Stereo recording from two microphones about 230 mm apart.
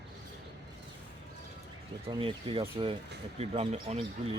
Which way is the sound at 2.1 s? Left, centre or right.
Right.